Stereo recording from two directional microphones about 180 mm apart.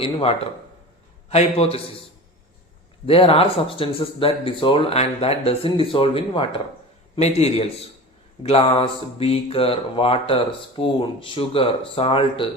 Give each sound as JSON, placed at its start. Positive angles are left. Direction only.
{"t": 0.0, "sound": "speech", "side_deg": 35}
{"t": 3.1, "sound": "speech", "side_deg": 30}